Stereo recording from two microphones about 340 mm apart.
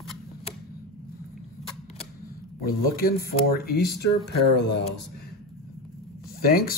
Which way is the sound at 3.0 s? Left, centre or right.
Left.